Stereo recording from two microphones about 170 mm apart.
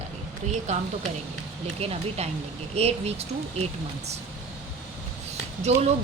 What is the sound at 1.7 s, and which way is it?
A woman's voice, 35° right (ahead or behind).